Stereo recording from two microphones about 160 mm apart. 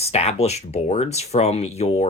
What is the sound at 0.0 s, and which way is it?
Speech, 40° left (ahead or behind).